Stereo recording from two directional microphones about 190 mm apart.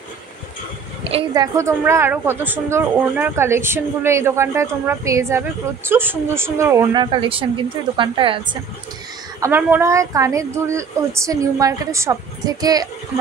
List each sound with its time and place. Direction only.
1.1 s a woman's voice: 20° right (ahead or behind)
9.4 s a woman's voice: 10° right (ahead or behind)